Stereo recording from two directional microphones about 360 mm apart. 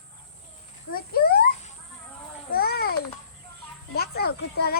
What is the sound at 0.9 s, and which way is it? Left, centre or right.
Speech, left.